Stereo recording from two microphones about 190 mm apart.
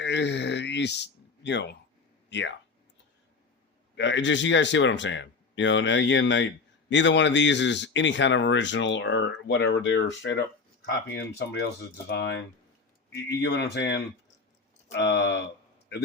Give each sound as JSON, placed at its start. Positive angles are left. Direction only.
{"t": 0.0, "sound": "speech", "side_deg": 65}
{"t": 3.9, "sound": "speech", "side_deg": 70}
{"t": 10.8, "sound": "speech", "side_deg": 60}
{"t": 13.4, "sound": "speech", "side_deg": 65}